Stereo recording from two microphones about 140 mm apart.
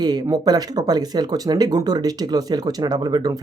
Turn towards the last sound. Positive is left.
turn(degrees=-30)  # may be behind; listen again after turning